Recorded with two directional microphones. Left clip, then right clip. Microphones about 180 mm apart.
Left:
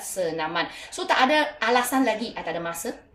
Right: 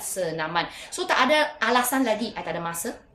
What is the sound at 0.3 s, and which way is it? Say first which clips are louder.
A woman's voice: even; 25° right (ahead or behind).